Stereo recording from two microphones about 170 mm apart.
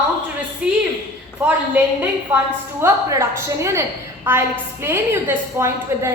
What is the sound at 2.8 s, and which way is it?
A woman's voice, 15° right (ahead or behind).